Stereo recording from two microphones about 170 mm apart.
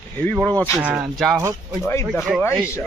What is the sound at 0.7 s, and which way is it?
Speech, 10° right (ahead or behind).